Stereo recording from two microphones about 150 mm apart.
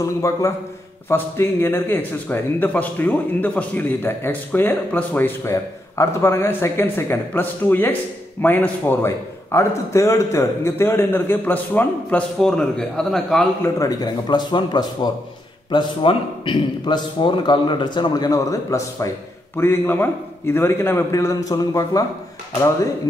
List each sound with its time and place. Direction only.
0.0 s a man's voice: 20° left (ahead or behind); by 13.5 s 5° left (ahead or behind)
13.6 s a man's voice: 25° left (ahead or behind)